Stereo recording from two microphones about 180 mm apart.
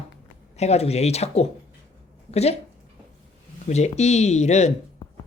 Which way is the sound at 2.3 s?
35° left (ahead or behind).